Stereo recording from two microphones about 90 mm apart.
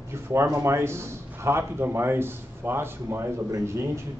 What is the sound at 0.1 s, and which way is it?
A man's voice, 30° right (ahead or behind).